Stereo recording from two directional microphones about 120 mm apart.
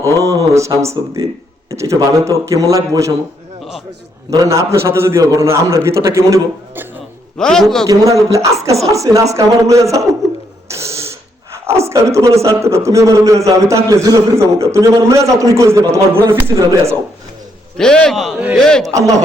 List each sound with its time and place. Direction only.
0.2 s a man's voice: 30° right (ahead or behind)
4.3 s a man's voice: 25° right (ahead or behind)
7.3 s a man's voice: 5° left (ahead or behind)
7.9 s a man's voice: 25° right (ahead or behind)
10.7 s a sound: 25° right (ahead or behind)
12.4 s a man's voice: 25° right (ahead or behind)
17.7 s a man's voice: 5° left (ahead or behind)
18.9 s a man's voice: 25° right (ahead or behind)